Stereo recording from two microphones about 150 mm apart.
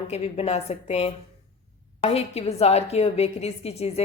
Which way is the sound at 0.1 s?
45° left (ahead or behind).